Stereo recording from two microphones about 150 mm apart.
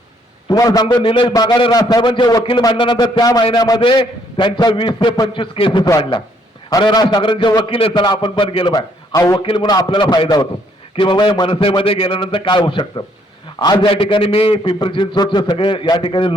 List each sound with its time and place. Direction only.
0.4 s a man's voice: 25° left (ahead or behind)